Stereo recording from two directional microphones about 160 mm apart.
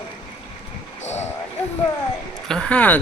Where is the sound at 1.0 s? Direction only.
45° left (ahead or behind).